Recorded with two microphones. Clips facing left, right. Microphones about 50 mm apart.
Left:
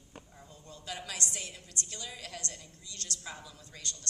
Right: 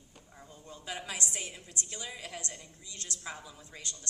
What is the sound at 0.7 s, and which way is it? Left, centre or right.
A woman's voice, right.